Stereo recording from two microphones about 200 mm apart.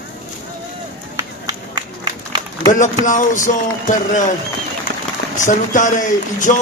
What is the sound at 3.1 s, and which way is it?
Speech, 40° left (ahead or behind).